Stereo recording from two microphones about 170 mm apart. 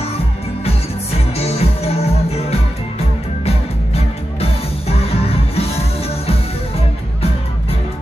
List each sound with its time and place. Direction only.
1.1 s music: 35° left (ahead or behind)